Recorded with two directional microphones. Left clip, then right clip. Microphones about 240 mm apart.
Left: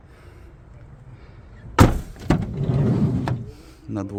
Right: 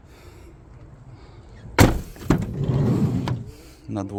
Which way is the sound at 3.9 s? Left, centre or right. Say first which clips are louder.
Even; centre.